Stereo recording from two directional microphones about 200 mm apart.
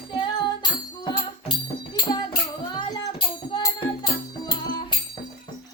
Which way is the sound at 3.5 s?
20° left (ahead or behind).